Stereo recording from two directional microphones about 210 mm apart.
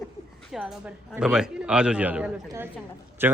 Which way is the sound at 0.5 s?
5° right (ahead or behind).